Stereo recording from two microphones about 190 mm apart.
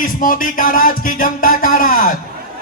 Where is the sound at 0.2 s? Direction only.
45° left (ahead or behind).